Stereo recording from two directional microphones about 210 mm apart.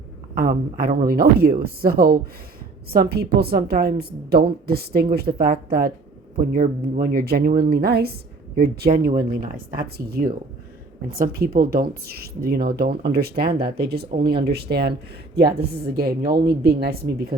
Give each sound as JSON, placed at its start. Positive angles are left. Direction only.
{"t": 0.3, "sound": "speech", "side_deg": -45}